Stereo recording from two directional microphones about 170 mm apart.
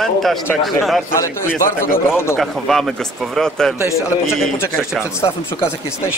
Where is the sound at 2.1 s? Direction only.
15° left (ahead or behind).